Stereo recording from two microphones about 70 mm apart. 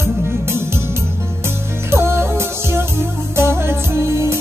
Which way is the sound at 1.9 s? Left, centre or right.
Right.